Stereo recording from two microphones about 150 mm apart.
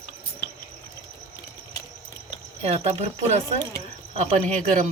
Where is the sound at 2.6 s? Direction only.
45° right (ahead or behind).